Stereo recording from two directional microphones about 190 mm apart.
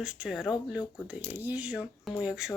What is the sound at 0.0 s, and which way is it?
Speech, 5° right (ahead or behind).